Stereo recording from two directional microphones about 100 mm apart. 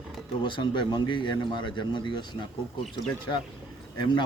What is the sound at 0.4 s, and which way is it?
A man's voice, 55° left (ahead or behind).